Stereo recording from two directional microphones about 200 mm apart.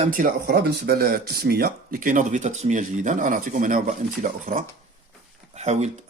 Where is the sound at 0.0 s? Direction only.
45° right (ahead or behind).